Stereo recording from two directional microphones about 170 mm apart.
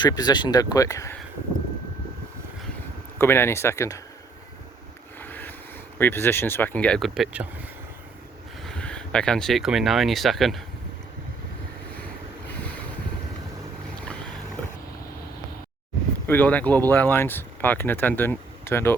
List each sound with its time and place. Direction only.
0.0 s speech: 25° left (ahead or behind)
3.2 s speech: 15° left (ahead or behind)
5.2 s a sound: 10° left (ahead or behind)
6.0 s speech: 15° left (ahead or behind); by 7.4 s 5° right (ahead or behind)
8.6 s speech: 5° left (ahead or behind)
16.2 s speech: 10° left (ahead or behind)